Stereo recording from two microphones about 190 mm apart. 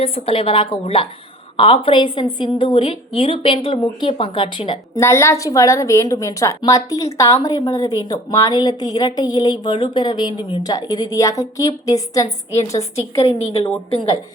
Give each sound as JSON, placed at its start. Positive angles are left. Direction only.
{"t": 0.0, "sound": "a woman's voice", "side_deg": 30}
{"t": 4.9, "sound": "a woman's voice", "side_deg": 15}
{"t": 13.2, "sound": "a woman's voice", "side_deg": 30}